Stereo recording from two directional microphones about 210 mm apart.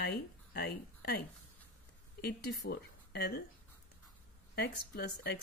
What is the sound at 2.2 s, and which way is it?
Speech, 50° left (ahead or behind).